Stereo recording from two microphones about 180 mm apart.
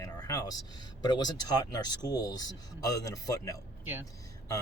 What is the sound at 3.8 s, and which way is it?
Speech, 10° right (ahead or behind).